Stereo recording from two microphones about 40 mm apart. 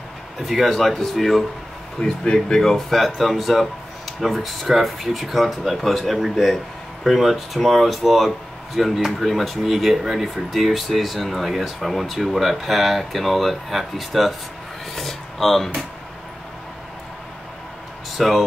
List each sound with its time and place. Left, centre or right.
0.5 s speech: centre
2.0 s speech: centre
2.5 s speech: centre
18.1 s speech: centre